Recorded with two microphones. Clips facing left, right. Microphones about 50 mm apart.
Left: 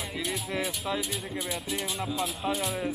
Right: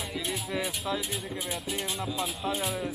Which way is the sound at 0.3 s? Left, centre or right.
Centre.